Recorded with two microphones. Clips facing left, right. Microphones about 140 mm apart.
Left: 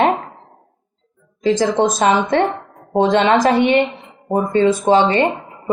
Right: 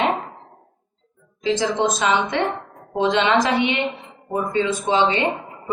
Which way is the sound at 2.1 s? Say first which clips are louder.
Left 5 dB; 45° left (ahead or behind).